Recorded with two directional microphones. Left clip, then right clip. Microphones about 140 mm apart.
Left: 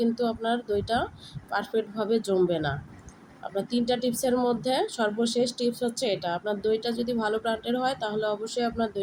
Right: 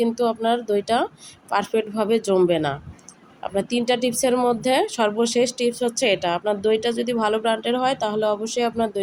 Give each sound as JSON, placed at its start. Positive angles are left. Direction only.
{"t": 0.0, "sound": "speech", "side_deg": -20}
{"t": 3.8, "sound": "speech", "side_deg": -20}